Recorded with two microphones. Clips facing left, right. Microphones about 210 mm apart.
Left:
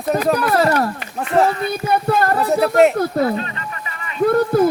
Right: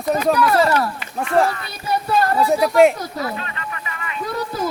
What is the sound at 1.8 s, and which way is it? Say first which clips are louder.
Speech: left 1 dB; 55° left (ahead or behind).